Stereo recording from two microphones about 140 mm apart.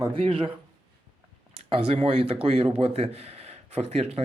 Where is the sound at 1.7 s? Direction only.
45° right (ahead or behind).